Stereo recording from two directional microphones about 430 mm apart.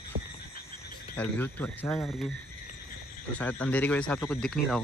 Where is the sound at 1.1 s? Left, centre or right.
Centre.